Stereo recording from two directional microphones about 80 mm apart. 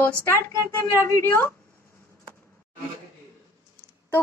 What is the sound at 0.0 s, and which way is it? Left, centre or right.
A woman's voice, left.